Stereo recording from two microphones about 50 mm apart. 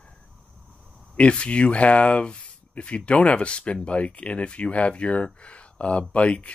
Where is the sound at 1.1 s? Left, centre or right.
Left.